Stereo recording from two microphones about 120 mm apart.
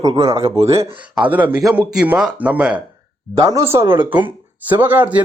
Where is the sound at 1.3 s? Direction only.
15° right (ahead or behind).